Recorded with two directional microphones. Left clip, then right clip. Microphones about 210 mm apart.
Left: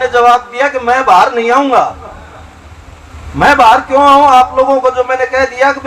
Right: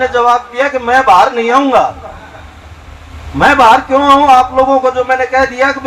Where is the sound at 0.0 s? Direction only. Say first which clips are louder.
Left 2 dB; 30° left (ahead or behind).